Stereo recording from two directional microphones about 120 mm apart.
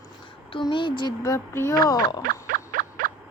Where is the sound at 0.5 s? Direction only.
45° left (ahead or behind); by 1.7 s 20° left (ahead or behind).